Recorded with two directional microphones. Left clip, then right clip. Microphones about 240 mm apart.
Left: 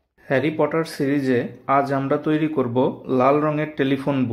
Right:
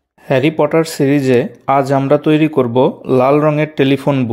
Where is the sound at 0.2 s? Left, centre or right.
Right.